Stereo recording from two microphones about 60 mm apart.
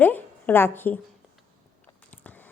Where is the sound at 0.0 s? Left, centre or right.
Left.